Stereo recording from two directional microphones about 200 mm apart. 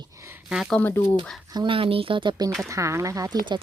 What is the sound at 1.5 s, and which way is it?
Speech, 25° right (ahead or behind).